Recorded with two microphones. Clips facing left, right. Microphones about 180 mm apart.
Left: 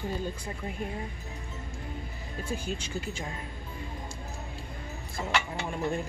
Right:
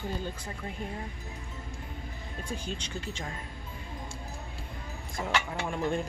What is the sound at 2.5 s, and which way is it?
Speech, 10° left (ahead or behind).